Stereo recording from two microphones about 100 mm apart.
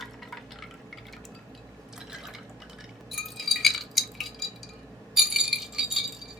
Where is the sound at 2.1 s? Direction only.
5° right (ahead or behind).